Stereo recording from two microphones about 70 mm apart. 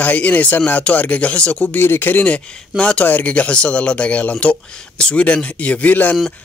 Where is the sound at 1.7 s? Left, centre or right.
Left.